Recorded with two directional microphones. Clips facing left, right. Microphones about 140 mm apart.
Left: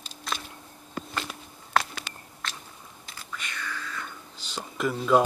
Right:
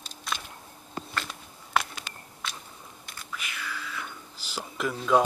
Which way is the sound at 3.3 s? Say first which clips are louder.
Left 1 dB; 5° right (ahead or behind).